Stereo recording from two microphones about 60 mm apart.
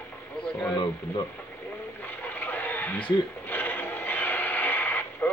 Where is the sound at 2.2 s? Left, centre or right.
Left.